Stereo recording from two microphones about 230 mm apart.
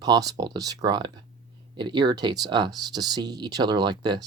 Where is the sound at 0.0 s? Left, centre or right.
Centre.